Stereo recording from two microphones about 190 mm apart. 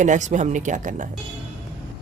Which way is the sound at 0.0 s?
40° right (ahead or behind).